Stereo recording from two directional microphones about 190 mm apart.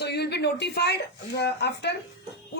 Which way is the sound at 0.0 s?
60° left (ahead or behind).